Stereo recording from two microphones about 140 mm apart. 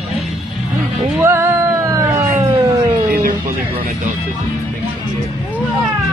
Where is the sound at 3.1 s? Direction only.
75° right (ahead or behind).